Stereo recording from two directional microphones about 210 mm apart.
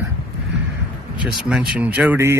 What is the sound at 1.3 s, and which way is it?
Speech, 5° right (ahead or behind).